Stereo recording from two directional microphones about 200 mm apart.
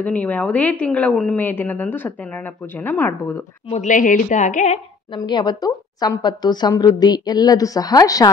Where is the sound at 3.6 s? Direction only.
35° left (ahead or behind).